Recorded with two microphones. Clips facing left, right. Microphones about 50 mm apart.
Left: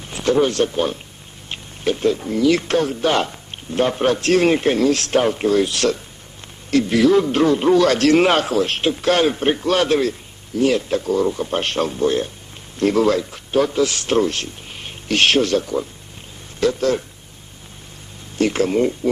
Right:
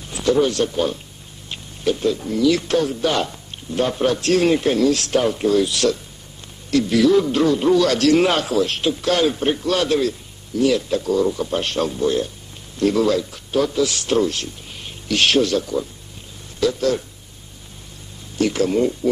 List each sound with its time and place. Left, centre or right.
0.1 s a man's voice: left
18.4 s speech: left